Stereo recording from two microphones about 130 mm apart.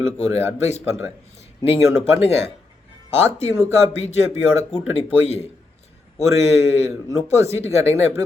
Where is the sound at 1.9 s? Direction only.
20° right (ahead or behind).